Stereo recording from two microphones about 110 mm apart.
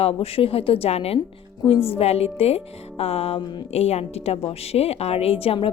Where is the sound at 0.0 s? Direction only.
60° left (ahead or behind).